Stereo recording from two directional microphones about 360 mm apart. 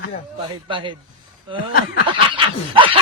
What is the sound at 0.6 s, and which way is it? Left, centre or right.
Speech, centre.